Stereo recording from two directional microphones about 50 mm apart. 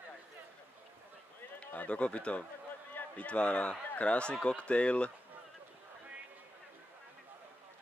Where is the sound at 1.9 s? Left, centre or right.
Left.